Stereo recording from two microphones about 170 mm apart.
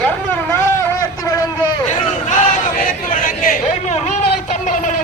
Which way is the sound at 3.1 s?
55° left (ahead or behind).